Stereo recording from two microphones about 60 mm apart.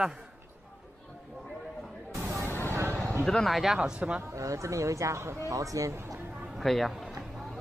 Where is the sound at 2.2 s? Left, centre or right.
Right.